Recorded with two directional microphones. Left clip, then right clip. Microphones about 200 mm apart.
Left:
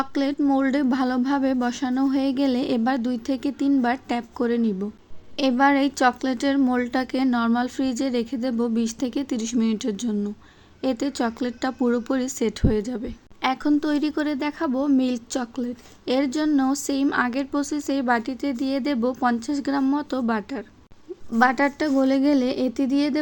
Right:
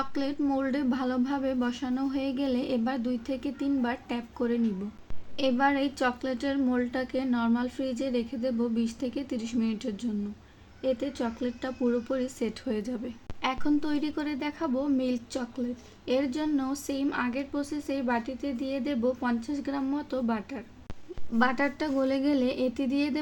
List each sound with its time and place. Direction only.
0.0 s speech: 30° left (ahead or behind)